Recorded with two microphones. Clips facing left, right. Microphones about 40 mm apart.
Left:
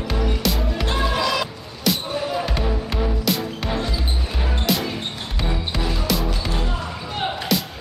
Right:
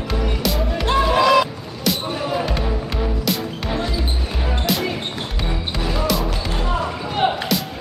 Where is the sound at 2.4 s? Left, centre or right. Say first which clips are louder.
Right 1 dB; centre.